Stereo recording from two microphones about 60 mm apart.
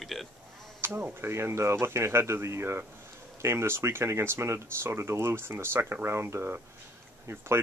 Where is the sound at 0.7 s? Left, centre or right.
Right.